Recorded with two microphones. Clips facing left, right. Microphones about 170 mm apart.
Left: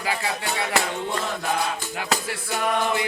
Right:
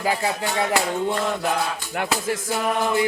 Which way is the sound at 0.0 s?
40° right (ahead or behind).